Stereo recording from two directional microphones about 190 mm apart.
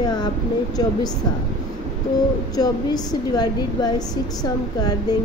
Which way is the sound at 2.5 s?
20° left (ahead or behind).